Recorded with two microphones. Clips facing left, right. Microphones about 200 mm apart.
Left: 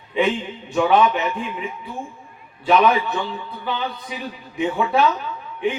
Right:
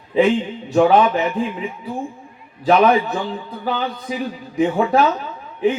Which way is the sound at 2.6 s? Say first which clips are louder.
Right 3 dB; 35° right (ahead or behind).